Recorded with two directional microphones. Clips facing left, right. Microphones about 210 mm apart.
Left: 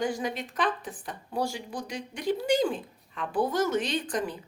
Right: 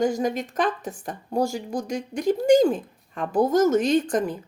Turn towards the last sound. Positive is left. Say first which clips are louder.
# right 9 dB
turn(degrees=-45)  # may be behind; listen again after turning